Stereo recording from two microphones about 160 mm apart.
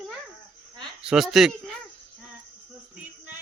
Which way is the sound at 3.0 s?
10° right (ahead or behind).